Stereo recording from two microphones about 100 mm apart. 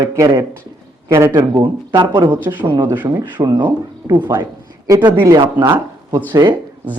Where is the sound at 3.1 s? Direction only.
45° right (ahead or behind).